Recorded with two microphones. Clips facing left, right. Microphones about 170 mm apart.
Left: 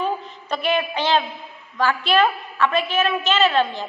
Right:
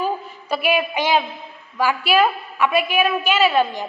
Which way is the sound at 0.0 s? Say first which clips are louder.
Right 1 dB; 10° right (ahead or behind).